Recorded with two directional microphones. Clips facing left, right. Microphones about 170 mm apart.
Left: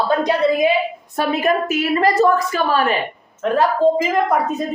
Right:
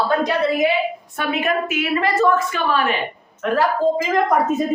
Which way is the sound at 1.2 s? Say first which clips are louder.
Left 4 dB; 40° left (ahead or behind).